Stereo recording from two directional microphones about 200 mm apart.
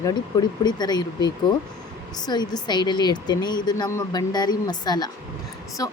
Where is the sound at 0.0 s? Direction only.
20° left (ahead or behind).